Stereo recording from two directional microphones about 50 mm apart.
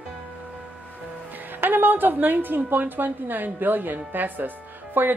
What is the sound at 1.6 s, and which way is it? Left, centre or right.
Speech, right.